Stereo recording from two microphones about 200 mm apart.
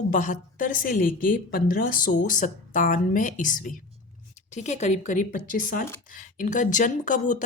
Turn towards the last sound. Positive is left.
turn(degrees=40)  # may be behind; listen again after turning